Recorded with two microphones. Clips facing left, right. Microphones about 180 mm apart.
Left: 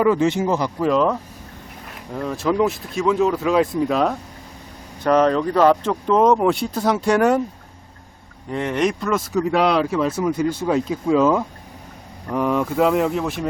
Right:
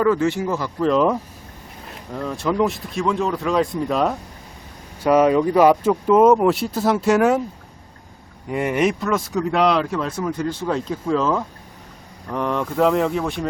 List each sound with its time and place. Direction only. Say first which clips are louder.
0.0 s speech: left 1 dB; 20° left (ahead or behind)
0.8 s speech: right 2 dB; 5° left (ahead or behind)
2.1 s speech: left 1 dB; centre (ahead or behind)
8.4 s speech: right 1 dB; 10° right (ahead or behind)